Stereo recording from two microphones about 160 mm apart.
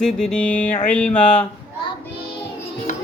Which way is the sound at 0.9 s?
5° left (ahead or behind).